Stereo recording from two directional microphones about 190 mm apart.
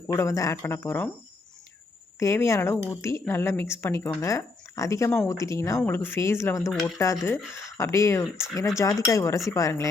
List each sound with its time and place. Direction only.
0.1 s speech: 15° left (ahead or behind)
2.1 s speech: 15° left (ahead or behind)